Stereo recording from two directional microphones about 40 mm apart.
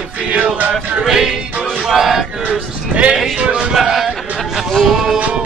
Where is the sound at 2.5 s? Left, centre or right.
Right.